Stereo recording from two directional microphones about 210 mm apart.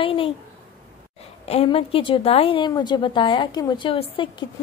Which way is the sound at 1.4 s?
30° left (ahead or behind).